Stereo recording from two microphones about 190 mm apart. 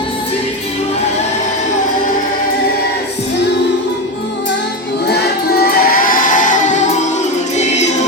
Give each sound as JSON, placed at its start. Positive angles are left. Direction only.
{"t": 5.0, "sound": "music", "side_deg": 55}